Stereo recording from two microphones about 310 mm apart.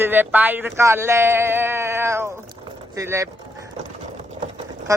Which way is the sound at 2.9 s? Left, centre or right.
Centre.